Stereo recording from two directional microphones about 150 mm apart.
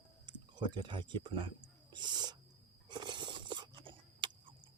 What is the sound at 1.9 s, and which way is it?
Owl, 30° right (ahead or behind).